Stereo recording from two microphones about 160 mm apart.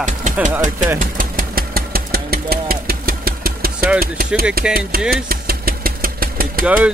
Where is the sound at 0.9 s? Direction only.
60° right (ahead or behind).